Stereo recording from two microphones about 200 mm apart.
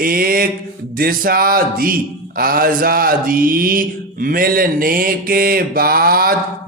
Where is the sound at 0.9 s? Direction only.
45° right (ahead or behind).